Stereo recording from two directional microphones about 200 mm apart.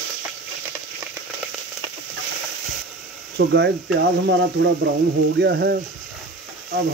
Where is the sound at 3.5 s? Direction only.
60° right (ahead or behind).